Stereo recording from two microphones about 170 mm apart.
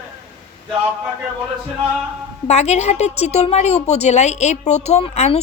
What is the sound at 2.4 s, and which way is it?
A woman's voice, 40° left (ahead or behind).